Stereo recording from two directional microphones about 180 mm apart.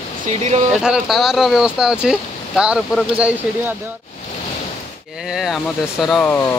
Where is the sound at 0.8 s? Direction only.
5° right (ahead or behind).